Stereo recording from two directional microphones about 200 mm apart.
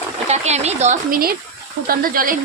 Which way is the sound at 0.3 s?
35° right (ahead or behind).